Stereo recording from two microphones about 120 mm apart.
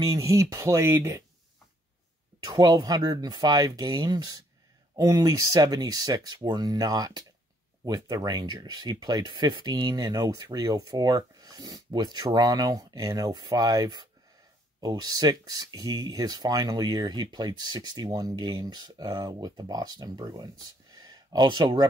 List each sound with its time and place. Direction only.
0.0 s speech: 30° right (ahead or behind)
2.4 s speech: 35° right (ahead or behind)
21.0 s a sound: 35° right (ahead or behind)